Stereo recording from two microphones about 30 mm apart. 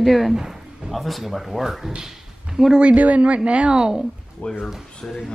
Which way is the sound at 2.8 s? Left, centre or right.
Right.